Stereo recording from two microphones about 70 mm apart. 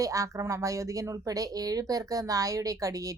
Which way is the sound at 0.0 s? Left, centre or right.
Right.